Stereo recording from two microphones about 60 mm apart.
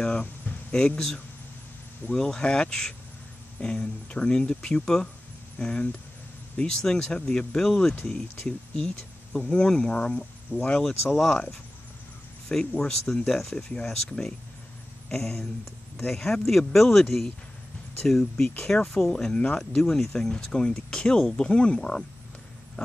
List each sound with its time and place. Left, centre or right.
0.0 s a sound: centre
2.0 s speech: centre
10.5 s speech: left
12.4 s speech: centre
15.0 s speech: centre
19.6 s speech: centre